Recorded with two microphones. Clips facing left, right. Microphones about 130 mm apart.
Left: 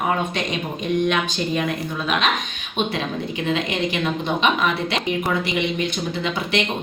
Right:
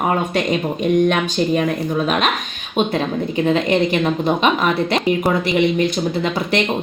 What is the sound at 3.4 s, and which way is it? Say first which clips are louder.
Speech: right 7 dB; 40° right (ahead or behind).